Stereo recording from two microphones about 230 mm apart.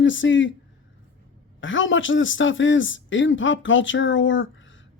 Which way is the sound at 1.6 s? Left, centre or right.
Left.